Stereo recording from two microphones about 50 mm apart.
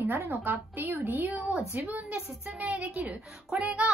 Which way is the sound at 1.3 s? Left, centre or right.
Right.